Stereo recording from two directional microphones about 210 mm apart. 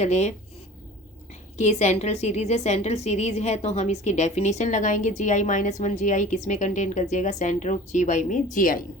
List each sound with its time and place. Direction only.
0.0 s a woman's voice: 30° left (ahead or behind)
1.5 s a woman's voice: 35° left (ahead or behind)